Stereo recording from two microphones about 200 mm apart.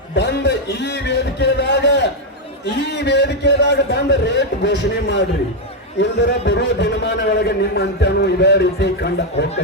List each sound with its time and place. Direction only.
0.1 s a man's voice: 60° left (ahead or behind)